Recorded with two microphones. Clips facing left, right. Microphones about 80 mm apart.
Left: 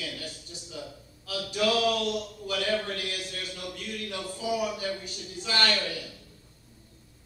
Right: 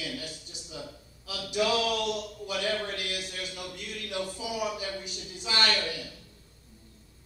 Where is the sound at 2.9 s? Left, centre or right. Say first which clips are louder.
Even; right.